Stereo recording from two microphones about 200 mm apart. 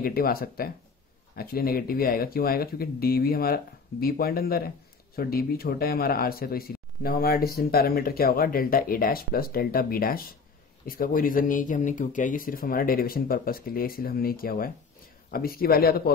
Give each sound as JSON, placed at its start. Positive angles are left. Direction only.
{"t": 0.0, "sound": "speech", "side_deg": 50}